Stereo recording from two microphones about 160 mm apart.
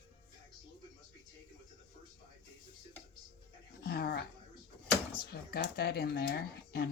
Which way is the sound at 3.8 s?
85° left.